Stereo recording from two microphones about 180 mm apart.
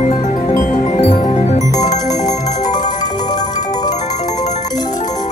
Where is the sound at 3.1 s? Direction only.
20° left (ahead or behind).